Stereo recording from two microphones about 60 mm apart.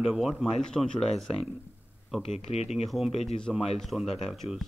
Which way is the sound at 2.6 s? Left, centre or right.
Centre.